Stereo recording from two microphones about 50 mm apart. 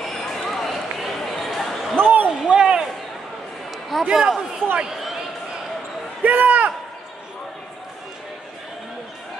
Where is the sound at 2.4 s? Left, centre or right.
Centre.